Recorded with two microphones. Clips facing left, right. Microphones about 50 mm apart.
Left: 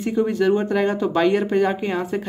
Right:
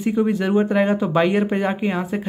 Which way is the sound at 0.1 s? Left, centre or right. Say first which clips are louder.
Left 1 dB; centre.